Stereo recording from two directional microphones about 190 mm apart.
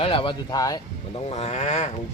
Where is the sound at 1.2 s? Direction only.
35° left (ahead or behind).